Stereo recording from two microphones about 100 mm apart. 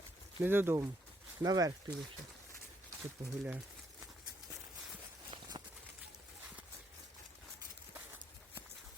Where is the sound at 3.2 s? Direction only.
65° right (ahead or behind).